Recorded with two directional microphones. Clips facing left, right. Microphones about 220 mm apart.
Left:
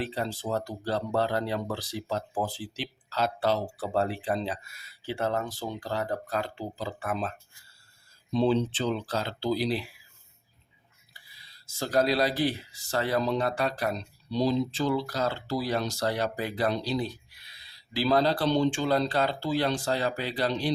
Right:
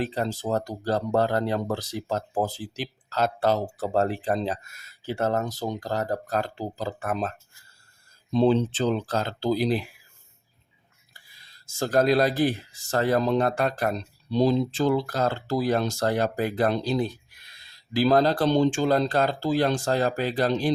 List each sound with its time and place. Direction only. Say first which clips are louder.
0.0 s speech: right 4 dB; 40° right (ahead or behind)
11.1 s speech: right 1 dB; 50° right (ahead or behind)